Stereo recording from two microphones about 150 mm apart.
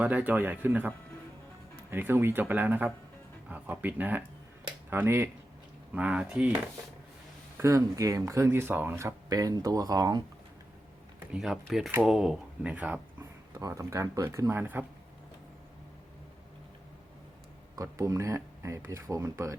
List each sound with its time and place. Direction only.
0.0 s speech: 10° right (ahead or behind)
7.6 s speech: 20° right (ahead or behind)
11.3 s speech: centre (ahead or behind)
13.5 s speech: 20° right (ahead or behind)
17.7 s speech: 20° right (ahead or behind)